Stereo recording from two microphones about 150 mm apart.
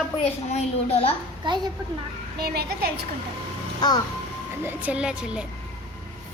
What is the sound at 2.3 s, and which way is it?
Speech, 90° right.